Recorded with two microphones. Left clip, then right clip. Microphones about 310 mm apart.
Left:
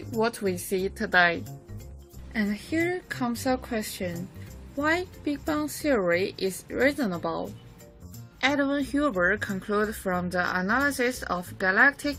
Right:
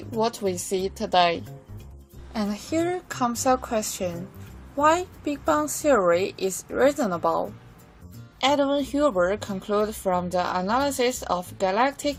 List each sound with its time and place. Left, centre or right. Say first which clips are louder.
0.2 s speech: right 2 dB; right
2.3 s speech: right 2 dB; right